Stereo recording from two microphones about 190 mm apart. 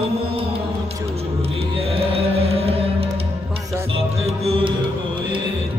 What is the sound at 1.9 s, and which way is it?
Music, 30° right (ahead or behind).